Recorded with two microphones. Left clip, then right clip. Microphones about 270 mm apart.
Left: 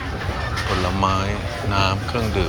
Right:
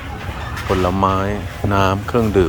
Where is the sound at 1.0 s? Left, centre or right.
Right.